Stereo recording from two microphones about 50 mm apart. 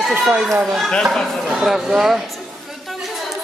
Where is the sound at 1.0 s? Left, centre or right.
Centre.